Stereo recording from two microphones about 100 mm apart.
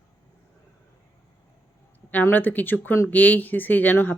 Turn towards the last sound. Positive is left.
turn(degrees=20)  # may be behind; listen again after turning